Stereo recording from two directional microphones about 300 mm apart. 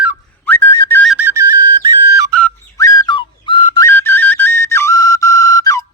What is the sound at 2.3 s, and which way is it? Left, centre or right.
Whistle, centre.